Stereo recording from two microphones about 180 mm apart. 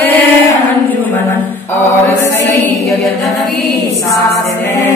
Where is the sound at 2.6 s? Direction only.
Centre (ahead or behind).